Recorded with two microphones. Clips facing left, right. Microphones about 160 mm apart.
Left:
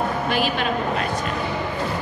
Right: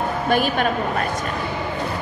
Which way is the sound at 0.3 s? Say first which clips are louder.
Right 6 dB; 50° right (ahead or behind).